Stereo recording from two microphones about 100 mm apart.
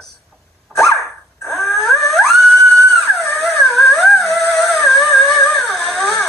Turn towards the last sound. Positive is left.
turn(degrees=0)  # may be behind; listen again after turning